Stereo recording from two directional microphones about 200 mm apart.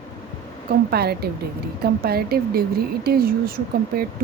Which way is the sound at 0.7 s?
50° right (ahead or behind).